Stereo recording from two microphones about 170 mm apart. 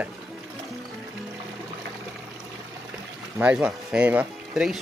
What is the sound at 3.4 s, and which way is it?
Speech, 5° right (ahead or behind).